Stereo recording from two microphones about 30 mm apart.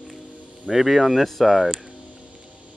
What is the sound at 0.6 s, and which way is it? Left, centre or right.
Speech, centre.